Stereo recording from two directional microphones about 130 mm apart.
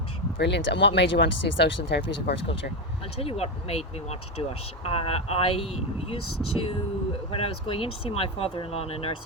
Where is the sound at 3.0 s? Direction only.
50° left (ahead or behind).